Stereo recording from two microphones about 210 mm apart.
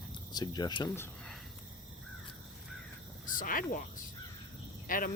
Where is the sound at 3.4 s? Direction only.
40° left (ahead or behind).